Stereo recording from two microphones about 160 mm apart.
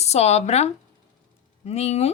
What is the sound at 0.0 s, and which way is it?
Speech, 40° left (ahead or behind).